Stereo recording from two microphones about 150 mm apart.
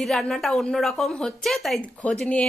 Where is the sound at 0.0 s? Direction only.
5° left (ahead or behind).